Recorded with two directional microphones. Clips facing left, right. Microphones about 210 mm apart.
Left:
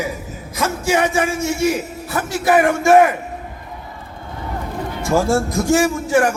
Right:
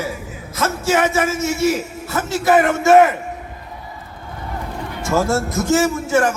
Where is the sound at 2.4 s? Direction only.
20° right (ahead or behind).